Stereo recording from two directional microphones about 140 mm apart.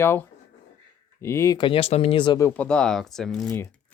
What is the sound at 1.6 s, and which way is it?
Speech, 40° left (ahead or behind).